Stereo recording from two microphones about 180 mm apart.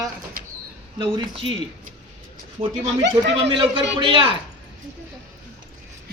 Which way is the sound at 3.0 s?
75° right (ahead or behind).